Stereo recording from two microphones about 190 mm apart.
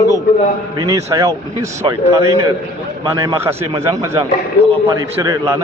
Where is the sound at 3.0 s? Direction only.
20° right (ahead or behind).